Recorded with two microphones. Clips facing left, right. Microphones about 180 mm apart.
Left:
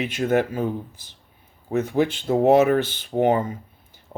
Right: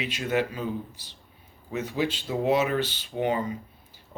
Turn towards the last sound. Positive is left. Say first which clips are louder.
# left 7 dB
turn(degrees=50)  # may be behind; listen again after turning